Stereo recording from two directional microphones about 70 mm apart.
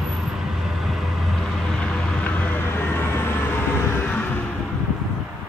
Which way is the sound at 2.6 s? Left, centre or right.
Left.